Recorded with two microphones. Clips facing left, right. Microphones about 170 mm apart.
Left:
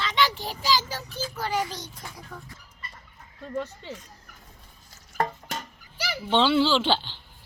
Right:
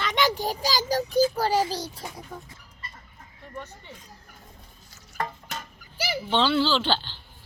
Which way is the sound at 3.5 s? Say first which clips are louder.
Left 8 dB; 90° left.